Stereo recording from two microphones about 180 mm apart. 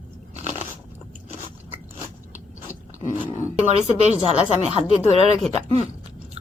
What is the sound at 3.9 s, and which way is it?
A woman's voice, 35° right (ahead or behind).